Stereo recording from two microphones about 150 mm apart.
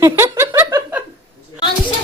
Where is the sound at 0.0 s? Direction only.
15° right (ahead or behind).